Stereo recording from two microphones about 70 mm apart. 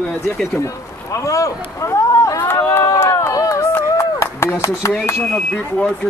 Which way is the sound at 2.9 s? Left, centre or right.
Left.